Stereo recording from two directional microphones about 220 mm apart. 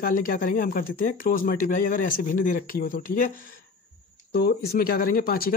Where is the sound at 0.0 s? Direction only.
40° left (ahead or behind).